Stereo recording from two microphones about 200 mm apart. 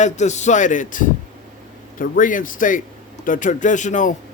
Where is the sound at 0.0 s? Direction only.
35° left (ahead or behind).